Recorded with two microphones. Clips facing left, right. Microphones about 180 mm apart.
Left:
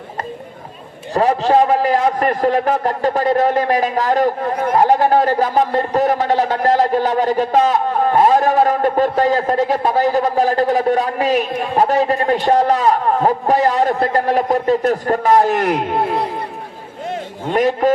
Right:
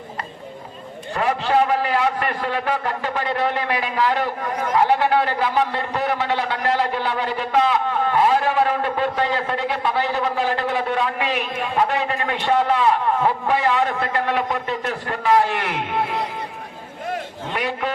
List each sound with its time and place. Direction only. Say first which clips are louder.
1.1 s a man's voice: left 6 dB; 35° left (ahead or behind)
17.5 s a man's voice: left 11 dB; 40° left (ahead or behind)